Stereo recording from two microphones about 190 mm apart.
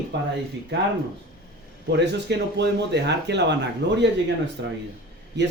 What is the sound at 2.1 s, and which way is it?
Speech, 65° right (ahead or behind).